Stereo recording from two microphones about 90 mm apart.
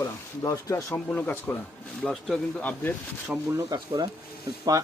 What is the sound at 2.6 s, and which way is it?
Speech, 15° left (ahead or behind).